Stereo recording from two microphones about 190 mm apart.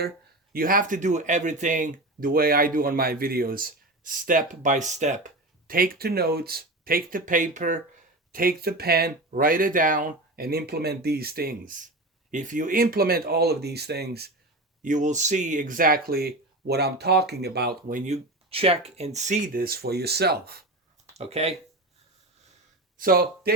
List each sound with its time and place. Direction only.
0.5 s speech: 50° right (ahead or behind)
14.8 s speech: 40° right (ahead or behind)
21.1 s speech: 35° right (ahead or behind)
23.0 s speech: 50° right (ahead or behind)